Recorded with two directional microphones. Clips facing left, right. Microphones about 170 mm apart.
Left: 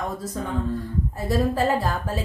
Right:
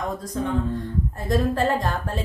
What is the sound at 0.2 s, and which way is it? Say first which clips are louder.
A woman's voice: right 2 dB; 5° left (ahead or behind).